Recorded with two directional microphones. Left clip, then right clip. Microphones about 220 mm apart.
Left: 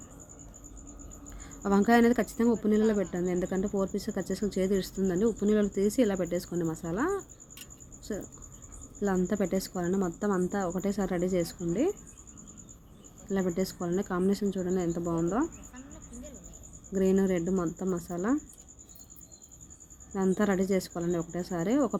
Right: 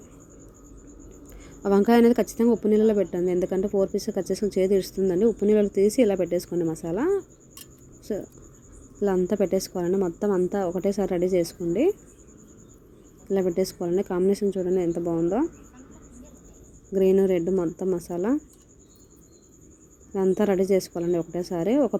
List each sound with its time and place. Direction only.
1.6 s speech: 10° right (ahead or behind)
5.7 s speech: 25° left (ahead or behind)
6.0 s speech: 10° right (ahead or behind)
13.3 s a woman's voice: 10° right (ahead or behind)
16.9 s speech: 10° right (ahead or behind)
20.1 s speech: 10° right (ahead or behind)